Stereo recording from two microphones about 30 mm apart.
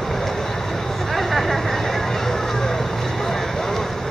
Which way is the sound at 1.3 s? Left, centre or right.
Centre.